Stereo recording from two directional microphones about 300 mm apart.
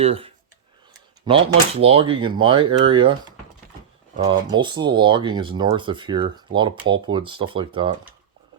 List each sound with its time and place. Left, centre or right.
0.0 s speech: centre
4.2 s speech: centre